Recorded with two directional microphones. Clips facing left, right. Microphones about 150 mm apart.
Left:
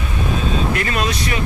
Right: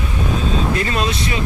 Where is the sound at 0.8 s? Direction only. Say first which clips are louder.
Right 1 dB; 25° right (ahead or behind).